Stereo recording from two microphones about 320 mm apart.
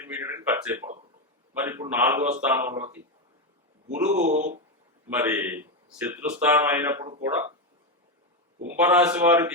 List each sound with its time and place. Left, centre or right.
0.0 s speech: centre
4.1 s speech: right
5.0 s speech: centre
8.8 s a man's voice: centre